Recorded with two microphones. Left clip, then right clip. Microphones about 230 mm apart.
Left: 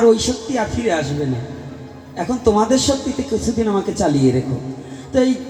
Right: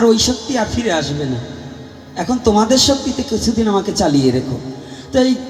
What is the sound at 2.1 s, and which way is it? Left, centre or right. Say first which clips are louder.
A man's voice: right 1 dB; right.